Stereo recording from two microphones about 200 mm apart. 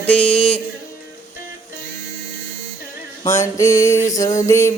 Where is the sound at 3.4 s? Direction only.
15° left (ahead or behind).